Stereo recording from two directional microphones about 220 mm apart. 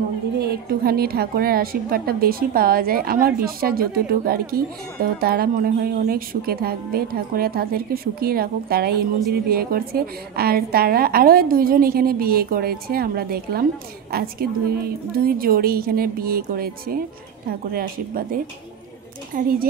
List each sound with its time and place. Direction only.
0.4 s a woman's voice: 45° right (ahead or behind)